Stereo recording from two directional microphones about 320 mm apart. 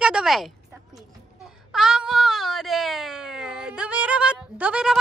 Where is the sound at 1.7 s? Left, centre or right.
Centre.